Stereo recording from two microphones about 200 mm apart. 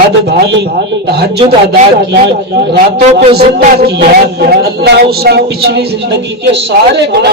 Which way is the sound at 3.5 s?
55° right (ahead or behind).